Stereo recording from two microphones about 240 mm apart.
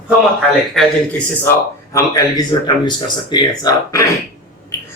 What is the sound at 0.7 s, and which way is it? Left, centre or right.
Speech, centre.